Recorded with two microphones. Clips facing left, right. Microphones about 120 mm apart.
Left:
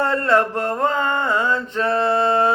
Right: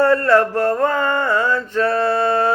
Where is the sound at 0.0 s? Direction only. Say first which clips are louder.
Right 4 dB; 20° left (ahead or behind).